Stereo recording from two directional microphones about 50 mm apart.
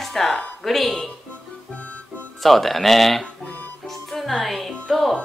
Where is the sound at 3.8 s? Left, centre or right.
Centre.